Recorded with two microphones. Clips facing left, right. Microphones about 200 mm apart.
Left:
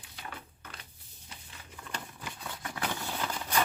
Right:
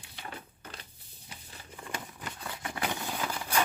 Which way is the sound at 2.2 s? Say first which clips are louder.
Right 2 dB; centre (ahead or behind).